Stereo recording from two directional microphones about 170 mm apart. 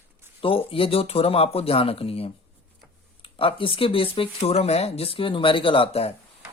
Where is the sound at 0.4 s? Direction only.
35° left (ahead or behind).